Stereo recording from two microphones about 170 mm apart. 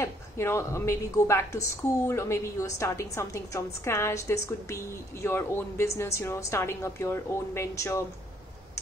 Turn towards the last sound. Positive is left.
turn(degrees=15)  # may be behind; listen again after turning